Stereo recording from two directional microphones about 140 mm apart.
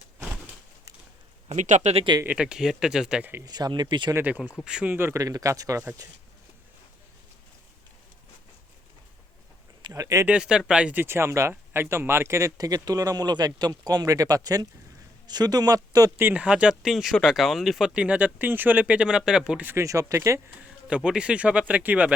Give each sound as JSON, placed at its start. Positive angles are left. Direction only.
{"t": 1.5, "sound": "speech", "side_deg": -60}
{"t": 2.2, "sound": "speech", "side_deg": -10}
{"t": 3.4, "sound": "speech", "side_deg": -30}
{"t": 4.1, "sound": "speech", "side_deg": -10}
{"t": 9.8, "sound": "speech", "side_deg": -25}
{"t": 10.2, "sound": "speech", "side_deg": -5}
{"t": 16.2, "sound": "speech", "side_deg": -10}
{"t": 20.8, "sound": "speech", "side_deg": -5}